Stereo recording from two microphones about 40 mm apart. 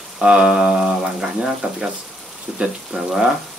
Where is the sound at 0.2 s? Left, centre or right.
Right.